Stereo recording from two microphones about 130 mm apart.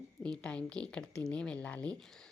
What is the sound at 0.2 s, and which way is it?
A woman's voice, 5° left (ahead or behind).